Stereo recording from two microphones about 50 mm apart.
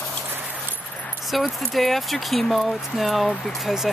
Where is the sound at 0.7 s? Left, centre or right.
Left.